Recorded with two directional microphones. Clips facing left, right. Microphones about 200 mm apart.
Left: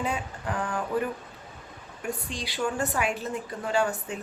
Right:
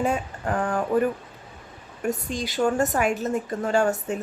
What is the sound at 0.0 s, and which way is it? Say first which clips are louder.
A woman's voice: right 6 dB; 45° right (ahead or behind).